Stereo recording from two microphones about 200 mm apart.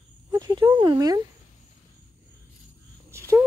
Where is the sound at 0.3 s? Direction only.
20° right (ahead or behind).